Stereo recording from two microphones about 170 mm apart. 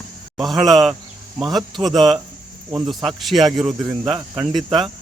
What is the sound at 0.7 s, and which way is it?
Speech, centre (ahead or behind).